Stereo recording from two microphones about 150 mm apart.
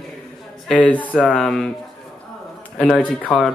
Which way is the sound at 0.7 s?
10° left (ahead or behind).